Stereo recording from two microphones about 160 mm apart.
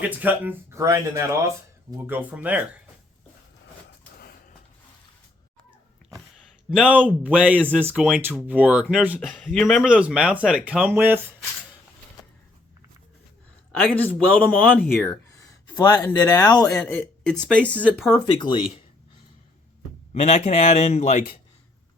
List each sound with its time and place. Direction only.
0.0 s speech: 10° right (ahead or behind)
4.2 s a sound: 75° left (ahead or behind)
6.7 s speech: 5° right (ahead or behind)
13.8 s speech: 10° left (ahead or behind)
16.7 s speech: 5° left (ahead or behind)
18.3 s speech: 30° left (ahead or behind)
20.1 s speech: 45° left (ahead or behind)